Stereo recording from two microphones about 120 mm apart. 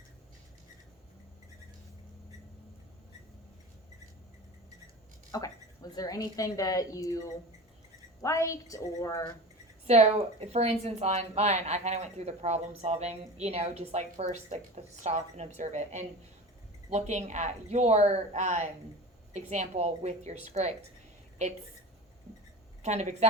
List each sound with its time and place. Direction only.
5.3 s a woman's voice: 30° left (ahead or behind)
9.8 s speech: 65° right (ahead or behind)
22.8 s speech: 70° right (ahead or behind)